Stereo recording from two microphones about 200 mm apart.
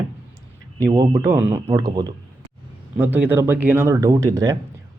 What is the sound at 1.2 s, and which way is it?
A man's voice, 10° right (ahead or behind).